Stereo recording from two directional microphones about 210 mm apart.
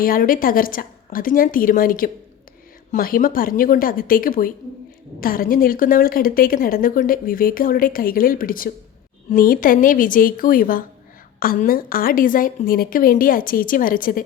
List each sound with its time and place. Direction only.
0.0 s a woman's voice: 40° left (ahead or behind)